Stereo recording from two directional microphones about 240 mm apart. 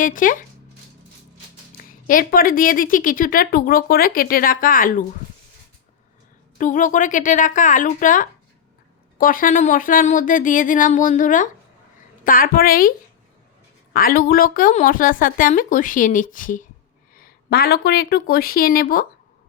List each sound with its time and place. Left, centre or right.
0.0 s a woman's voice: left
1.9 s a woman's voice: left
6.6 s a woman's voice: left
13.9 s a woman's voice: left